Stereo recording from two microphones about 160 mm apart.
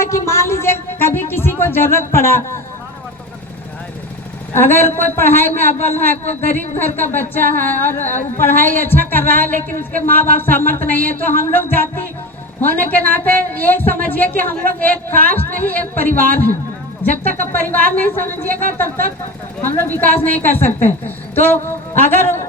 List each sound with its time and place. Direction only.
0.0 s speech: 15° left (ahead or behind)
4.5 s a woman's voice: 15° left (ahead or behind)
8.0 s a woman's voice: 45° left (ahead or behind)
8.4 s a woman's voice: 15° left (ahead or behind)
19.6 s a woman's voice: 15° left (ahead or behind)